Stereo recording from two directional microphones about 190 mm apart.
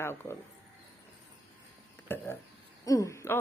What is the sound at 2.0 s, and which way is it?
Speech, 10° left (ahead or behind).